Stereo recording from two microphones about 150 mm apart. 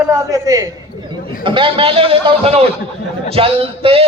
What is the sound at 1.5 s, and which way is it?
A man's voice, 35° right (ahead or behind).